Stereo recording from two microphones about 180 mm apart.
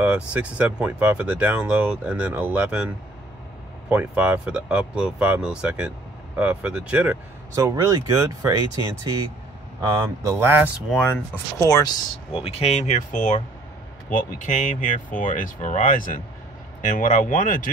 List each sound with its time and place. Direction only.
0.0 s speech: 5° right (ahead or behind)
3.9 s speech: 5° right (ahead or behind)
7.5 s speech: 20° right (ahead or behind)
11.6 s speech: 15° left (ahead or behind)
12.4 s speech: 35° left (ahead or behind)